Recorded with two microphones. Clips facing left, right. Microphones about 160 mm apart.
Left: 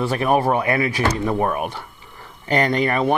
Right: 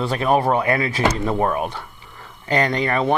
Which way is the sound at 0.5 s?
20° left (ahead or behind).